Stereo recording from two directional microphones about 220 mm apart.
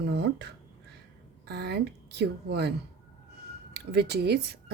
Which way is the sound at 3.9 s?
50° right (ahead or behind).